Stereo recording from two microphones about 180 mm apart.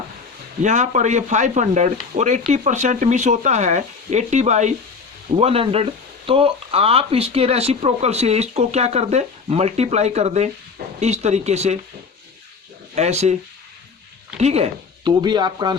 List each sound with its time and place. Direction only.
0.6 s speech: 40° right (ahead or behind)
13.0 s speech: 40° right (ahead or behind)
14.3 s speech: 35° right (ahead or behind)
15.2 s speech: 25° right (ahead or behind)